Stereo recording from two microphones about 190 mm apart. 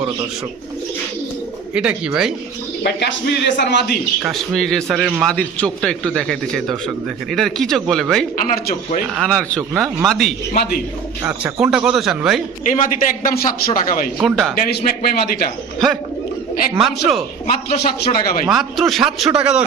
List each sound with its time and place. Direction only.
1.7 s a man's voice: 5° right (ahead or behind)
2.8 s a man's voice: 60° left (ahead or behind)
4.2 s a man's voice: centre (ahead or behind)
8.4 s speech: 45° left (ahead or behind)
9.1 s a man's voice: 5° left (ahead or behind)
12.6 s speech: 40° left (ahead or behind)
14.2 s a man's voice: centre (ahead or behind)
14.5 s speech: 55° left (ahead or behind)
16.7 s a man's voice: centre (ahead or behind)
17.4 s speech: 50° left (ahead or behind)
18.4 s a man's voice: centre (ahead or behind)